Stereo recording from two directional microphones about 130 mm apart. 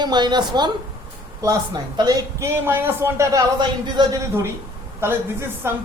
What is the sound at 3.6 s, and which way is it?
Speech, 30° right (ahead or behind).